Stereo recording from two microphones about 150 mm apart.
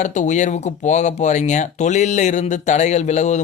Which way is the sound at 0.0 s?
55° left (ahead or behind).